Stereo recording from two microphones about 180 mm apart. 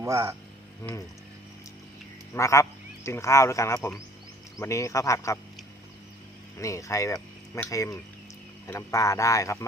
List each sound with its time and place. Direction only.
0.0 s speech: 20° right (ahead or behind)
2.3 s speech: 15° left (ahead or behind)
6.6 s speech: 15° left (ahead or behind)